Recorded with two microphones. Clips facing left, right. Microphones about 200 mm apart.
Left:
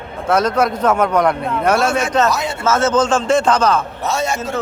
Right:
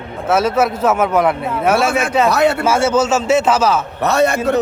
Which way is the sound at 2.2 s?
65° right (ahead or behind).